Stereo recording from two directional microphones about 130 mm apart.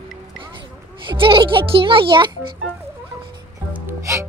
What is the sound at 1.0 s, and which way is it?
A child's voice, 40° right (ahead or behind).